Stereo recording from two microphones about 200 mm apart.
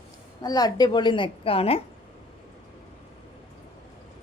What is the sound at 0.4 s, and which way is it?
A woman's voice, 20° left (ahead or behind).